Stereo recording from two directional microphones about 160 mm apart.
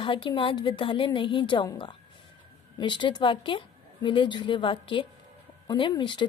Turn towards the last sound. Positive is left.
turn(degrees=30)  # may be behind; listen again after turning